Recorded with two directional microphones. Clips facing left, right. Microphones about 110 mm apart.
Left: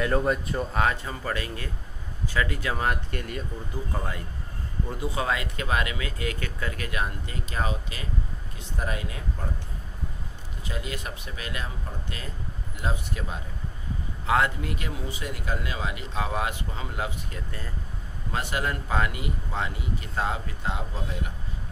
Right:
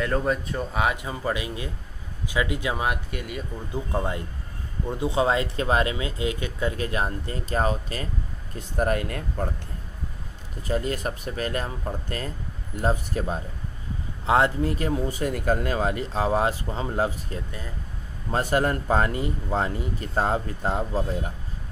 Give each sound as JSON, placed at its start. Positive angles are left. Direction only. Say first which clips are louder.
{"t": 0.0, "sound": "speech", "louder": "even", "side_deg": 0}
{"t": 0.7, "sound": "speech", "louder": "right 1 dB", "side_deg": -15}
{"t": 3.7, "sound": "speech", "louder": "right 7 dB", "side_deg": -20}
{"t": 8.5, "sound": "speech", "louder": "right 8 dB", "side_deg": -55}
{"t": 10.7, "sound": "speech", "louder": "right 8 dB", "side_deg": -40}
{"t": 14.2, "sound": "speech", "louder": "right 4 dB", "side_deg": -30}